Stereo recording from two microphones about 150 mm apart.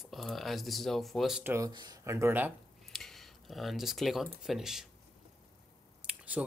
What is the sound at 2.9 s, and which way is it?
Speech, centre (ahead or behind).